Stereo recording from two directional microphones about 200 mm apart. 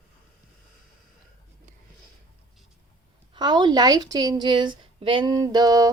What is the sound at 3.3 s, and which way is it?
A woman's voice, 20° right (ahead or behind).